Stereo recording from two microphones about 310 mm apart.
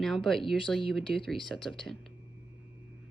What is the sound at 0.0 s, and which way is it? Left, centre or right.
Speech, centre.